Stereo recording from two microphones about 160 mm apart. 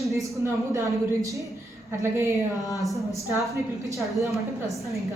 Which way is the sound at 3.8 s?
20° right (ahead or behind).